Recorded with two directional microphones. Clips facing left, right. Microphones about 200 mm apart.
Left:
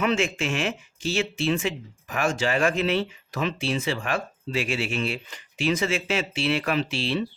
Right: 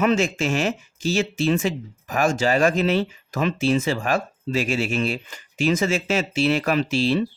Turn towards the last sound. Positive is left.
turn(degrees=-45)  # may be behind; listen again after turning